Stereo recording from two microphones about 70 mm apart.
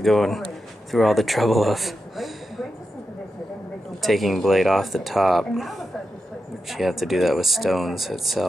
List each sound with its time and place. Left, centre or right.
0.0 s speech: centre
4.0 s speech: centre